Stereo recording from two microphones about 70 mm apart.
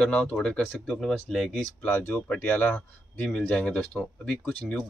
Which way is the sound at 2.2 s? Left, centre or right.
Centre.